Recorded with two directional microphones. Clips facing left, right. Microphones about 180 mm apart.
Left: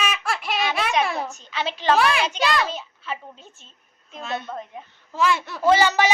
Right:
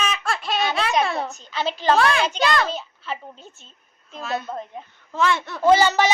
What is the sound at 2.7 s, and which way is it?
Speech, 35° right (ahead or behind).